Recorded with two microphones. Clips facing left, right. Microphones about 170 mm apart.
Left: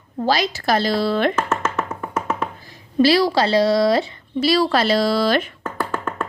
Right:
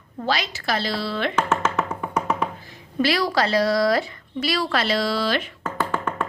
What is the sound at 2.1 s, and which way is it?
Hands, centre (ahead or behind).